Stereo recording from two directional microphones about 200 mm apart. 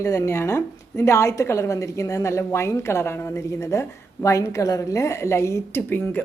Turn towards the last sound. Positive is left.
turn(degrees=10)  # may be behind; listen again after turning